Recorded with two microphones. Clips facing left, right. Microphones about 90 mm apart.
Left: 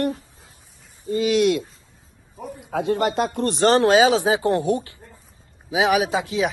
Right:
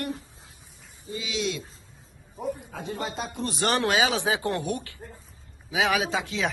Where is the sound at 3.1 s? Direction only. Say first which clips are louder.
Left 10 dB; 55° left (ahead or behind).